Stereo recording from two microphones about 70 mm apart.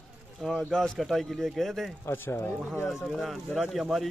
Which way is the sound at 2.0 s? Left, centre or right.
Left.